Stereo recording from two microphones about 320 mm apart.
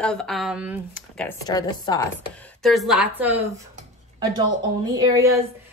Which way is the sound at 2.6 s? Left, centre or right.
Centre.